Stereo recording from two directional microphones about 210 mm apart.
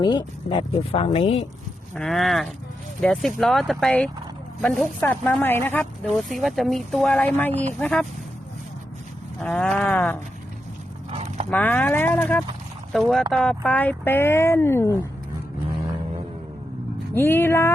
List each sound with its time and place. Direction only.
0.0 s speech: 20° left (ahead or behind)
2.0 s speech: centre (ahead or behind)
9.4 s speech: 5° left (ahead or behind)
11.1 s dog: 30° right (ahead or behind)
11.5 s speech: 10° left (ahead or behind)
17.2 s speech: 10° left (ahead or behind)